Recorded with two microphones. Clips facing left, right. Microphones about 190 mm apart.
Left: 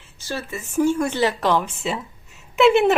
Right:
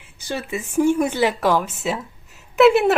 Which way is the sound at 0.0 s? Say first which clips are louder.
Right 2 dB; 15° right (ahead or behind).